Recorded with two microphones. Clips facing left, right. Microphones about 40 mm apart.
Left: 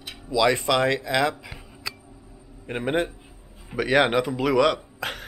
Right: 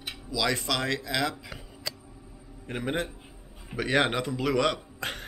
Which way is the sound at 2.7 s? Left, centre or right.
Left.